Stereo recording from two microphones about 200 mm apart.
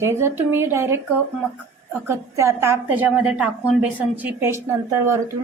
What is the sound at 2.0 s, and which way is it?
A woman's voice, 15° right (ahead or behind).